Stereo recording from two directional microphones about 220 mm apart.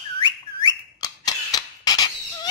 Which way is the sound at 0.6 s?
15° left (ahead or behind).